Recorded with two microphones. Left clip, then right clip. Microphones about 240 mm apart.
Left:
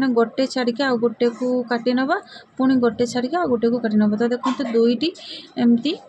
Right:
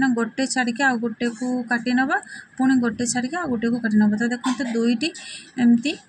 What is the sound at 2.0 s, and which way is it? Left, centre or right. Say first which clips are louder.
A woman's voice: even; centre.